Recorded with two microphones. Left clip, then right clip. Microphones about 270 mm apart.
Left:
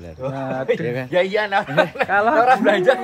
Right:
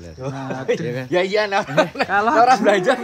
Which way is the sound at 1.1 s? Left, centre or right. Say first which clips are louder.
Even; right.